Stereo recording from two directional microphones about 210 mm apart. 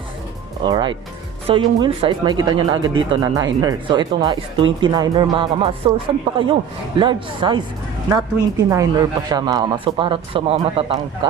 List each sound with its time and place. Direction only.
0.6 s speech: 20° right (ahead or behind)